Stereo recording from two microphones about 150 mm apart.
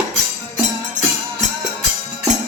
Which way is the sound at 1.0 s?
60° right (ahead or behind).